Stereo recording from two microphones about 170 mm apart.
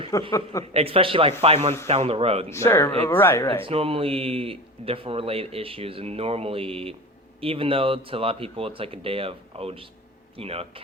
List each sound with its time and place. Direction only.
0.1 s speech: 20° left (ahead or behind)
0.7 s speech: 35° right (ahead or behind)
2.5 s speech: 15° left (ahead or behind)
3.6 s speech: 35° right (ahead or behind)